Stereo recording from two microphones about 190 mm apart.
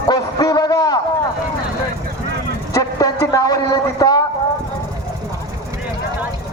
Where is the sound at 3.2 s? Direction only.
20° left (ahead or behind).